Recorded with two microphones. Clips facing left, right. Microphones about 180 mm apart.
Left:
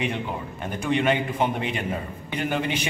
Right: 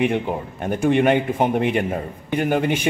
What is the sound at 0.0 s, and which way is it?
A man's voice, 55° right (ahead or behind).